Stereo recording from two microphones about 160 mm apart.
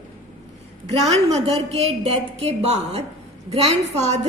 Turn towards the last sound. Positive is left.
turn(degrees=-45)  # may be behind; listen again after turning